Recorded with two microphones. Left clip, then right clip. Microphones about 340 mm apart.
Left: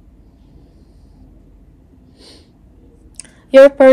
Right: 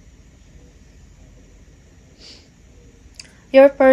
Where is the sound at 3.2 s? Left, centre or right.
Left.